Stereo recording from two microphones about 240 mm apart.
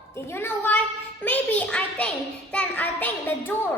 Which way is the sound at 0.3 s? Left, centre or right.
Centre.